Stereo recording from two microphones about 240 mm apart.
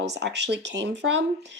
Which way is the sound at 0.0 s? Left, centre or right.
Right.